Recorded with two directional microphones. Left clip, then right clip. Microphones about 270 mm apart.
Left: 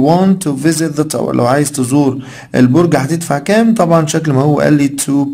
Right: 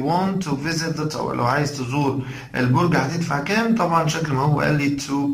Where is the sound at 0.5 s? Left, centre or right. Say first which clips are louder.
Left 10 dB; left.